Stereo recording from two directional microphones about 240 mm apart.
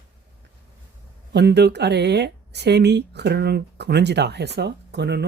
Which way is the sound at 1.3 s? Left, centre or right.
Right.